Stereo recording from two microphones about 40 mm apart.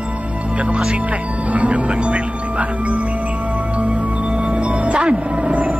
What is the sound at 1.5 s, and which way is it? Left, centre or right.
Speech, right.